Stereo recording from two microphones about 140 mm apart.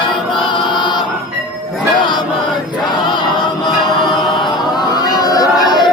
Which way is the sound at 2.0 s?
35° left (ahead or behind).